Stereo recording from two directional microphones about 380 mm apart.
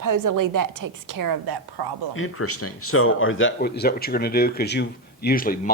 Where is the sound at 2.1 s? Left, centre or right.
Left.